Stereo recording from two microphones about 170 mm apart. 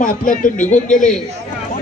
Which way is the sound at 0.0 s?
55° left (ahead or behind).